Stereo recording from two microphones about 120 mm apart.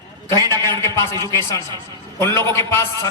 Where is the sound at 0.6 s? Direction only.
25° left (ahead or behind).